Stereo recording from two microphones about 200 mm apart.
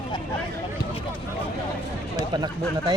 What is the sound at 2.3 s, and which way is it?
Speech, 20° right (ahead or behind).